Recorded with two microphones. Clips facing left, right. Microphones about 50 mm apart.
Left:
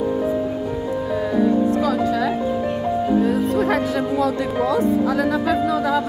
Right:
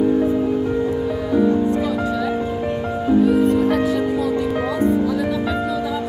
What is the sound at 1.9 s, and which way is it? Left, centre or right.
Music, left.